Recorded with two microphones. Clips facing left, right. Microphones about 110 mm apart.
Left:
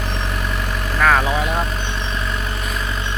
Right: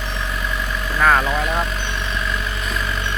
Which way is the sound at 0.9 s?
5° right (ahead or behind).